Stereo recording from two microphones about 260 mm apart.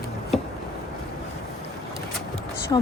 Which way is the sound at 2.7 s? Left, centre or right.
Centre.